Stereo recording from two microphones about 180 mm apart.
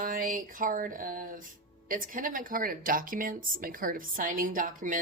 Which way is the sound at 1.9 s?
50° right (ahead or behind).